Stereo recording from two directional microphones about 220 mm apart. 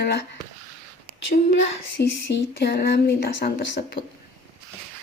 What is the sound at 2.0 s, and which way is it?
Speech, 50° left (ahead or behind).